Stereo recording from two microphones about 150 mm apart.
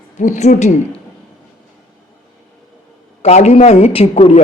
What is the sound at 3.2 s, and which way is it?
A man's voice, 45° left (ahead or behind).